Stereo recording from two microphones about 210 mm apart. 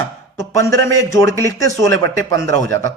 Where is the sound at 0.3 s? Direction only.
15° left (ahead or behind).